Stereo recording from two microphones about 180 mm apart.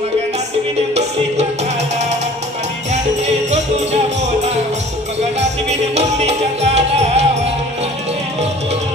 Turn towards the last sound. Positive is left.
turn(degrees=-35)  # may be behind; listen again after turning